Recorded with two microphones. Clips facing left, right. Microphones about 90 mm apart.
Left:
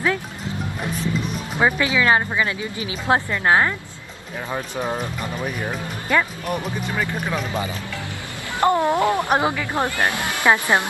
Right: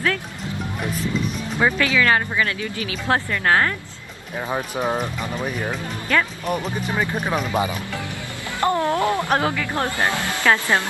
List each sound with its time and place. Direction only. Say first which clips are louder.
1.6 s speech: even; 20° left (ahead or behind)
4.5 s speech: right 2 dB; 15° right (ahead or behind)
6.1 s speech: left 1 dB; 15° left (ahead or behind)
6.4 s speech: right 1 dB; 5° left (ahead or behind)
7.0 s speech: right 2 dB; 20° right (ahead or behind)
8.5 s speech: left 2 dB; 20° left (ahead or behind)